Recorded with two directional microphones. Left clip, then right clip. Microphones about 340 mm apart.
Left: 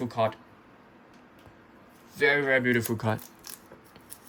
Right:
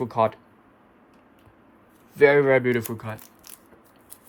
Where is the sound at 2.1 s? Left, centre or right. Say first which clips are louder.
Right 6 dB; centre.